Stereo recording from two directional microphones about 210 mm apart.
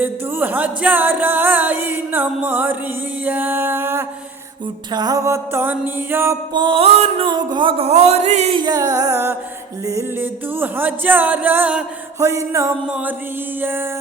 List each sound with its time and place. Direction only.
0.0 s music: 10° right (ahead or behind)
6.5 s music: 20° right (ahead or behind)